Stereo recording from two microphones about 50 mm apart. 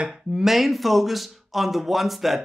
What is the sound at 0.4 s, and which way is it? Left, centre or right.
Speech, centre.